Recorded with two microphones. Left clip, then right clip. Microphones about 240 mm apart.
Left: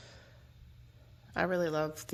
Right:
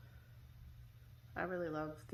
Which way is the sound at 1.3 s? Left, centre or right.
Left.